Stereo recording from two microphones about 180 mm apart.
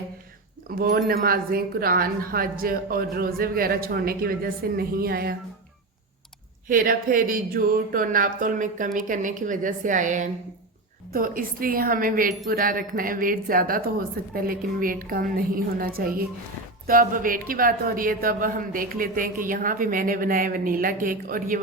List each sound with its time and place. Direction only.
0.8 s a woman's voice: 55° right (ahead or behind)
6.7 s a woman's voice: 50° right (ahead or behind)